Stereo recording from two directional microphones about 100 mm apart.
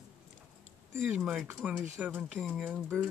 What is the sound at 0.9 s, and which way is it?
Speech, 15° right (ahead or behind).